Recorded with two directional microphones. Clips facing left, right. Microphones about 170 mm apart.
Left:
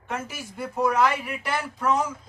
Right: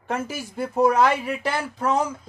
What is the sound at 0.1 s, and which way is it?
Speech, 30° right (ahead or behind).